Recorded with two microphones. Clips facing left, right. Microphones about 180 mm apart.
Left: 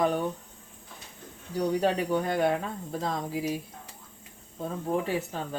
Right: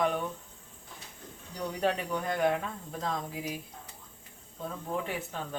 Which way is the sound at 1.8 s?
30° left (ahead or behind).